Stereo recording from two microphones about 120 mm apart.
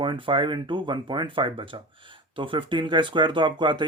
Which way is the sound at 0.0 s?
45° right (ahead or behind).